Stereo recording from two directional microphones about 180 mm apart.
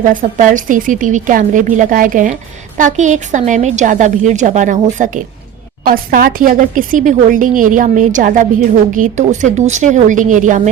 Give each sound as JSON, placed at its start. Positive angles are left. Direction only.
{"t": 0.0, "sound": "a woman's voice", "side_deg": -45}